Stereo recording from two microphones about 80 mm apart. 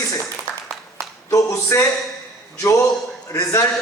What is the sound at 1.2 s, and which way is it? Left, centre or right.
Speech, left.